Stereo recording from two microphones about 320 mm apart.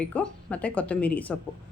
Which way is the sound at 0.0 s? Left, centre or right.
Centre.